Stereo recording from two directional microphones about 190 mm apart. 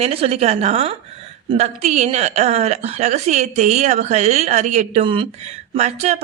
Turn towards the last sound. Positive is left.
turn(degrees=-35)  # may be behind; listen again after turning